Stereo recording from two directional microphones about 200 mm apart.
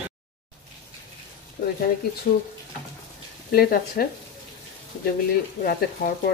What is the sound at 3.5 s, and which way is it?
Speech, 50° left (ahead or behind).